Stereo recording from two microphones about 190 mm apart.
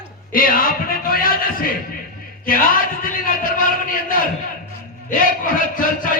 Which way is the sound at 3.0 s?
45° left (ahead or behind).